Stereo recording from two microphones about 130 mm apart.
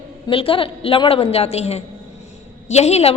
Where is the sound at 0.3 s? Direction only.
45° left (ahead or behind).